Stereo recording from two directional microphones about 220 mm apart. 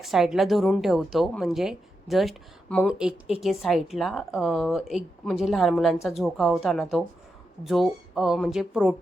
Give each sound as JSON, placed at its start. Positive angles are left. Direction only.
{"t": 0.0, "sound": "a woman's voice", "side_deg": 0}